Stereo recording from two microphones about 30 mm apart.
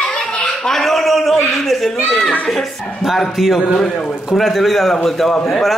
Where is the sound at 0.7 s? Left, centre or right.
Centre.